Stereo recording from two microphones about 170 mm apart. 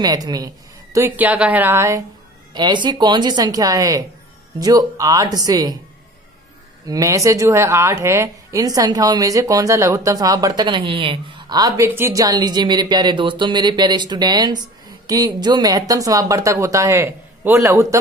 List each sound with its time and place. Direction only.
0.0 s a woman's voice: 20° right (ahead or behind)
2.5 s a woman's voice: 25° right (ahead or behind)
6.9 s a woman's voice: 20° right (ahead or behind)